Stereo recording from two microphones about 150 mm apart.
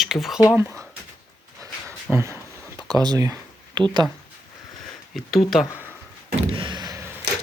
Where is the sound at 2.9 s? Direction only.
25° right (ahead or behind).